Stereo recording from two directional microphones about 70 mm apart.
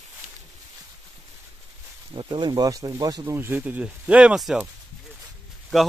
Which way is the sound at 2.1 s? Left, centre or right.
Right.